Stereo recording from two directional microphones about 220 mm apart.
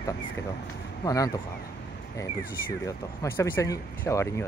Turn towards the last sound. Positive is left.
turn(degrees=10)  # may be behind; listen again after turning